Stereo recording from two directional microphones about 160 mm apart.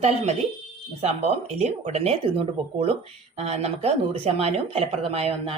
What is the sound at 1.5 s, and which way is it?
Speech, 45° right (ahead or behind).